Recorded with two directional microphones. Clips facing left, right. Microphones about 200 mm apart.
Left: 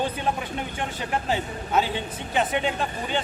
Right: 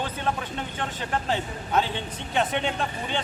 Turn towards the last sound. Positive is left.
turn(degrees=5)  # may be behind; listen again after turning